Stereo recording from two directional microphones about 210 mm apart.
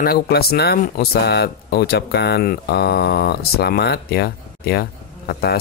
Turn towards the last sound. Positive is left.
turn(degrees=45)  # may be behind; listen again after turning